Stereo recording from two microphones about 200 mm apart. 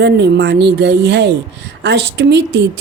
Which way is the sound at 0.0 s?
60° right (ahead or behind).